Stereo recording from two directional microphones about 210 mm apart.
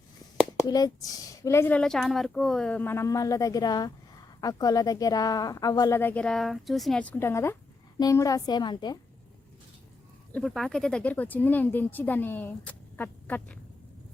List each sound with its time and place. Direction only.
0.6 s a woman's voice: 15° left (ahead or behind)
10.3 s speech: centre (ahead or behind)